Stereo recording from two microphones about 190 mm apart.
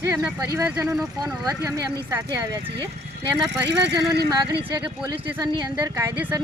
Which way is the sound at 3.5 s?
65° right (ahead or behind).